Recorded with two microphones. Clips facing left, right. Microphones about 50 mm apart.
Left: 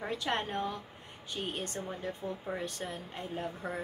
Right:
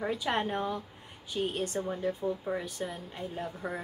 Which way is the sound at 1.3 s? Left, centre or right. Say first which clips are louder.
Right 6 dB; centre.